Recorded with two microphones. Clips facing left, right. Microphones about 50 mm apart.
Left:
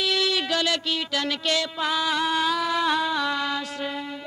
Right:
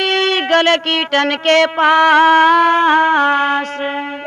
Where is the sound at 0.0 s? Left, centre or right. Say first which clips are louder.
Right 9 dB; right.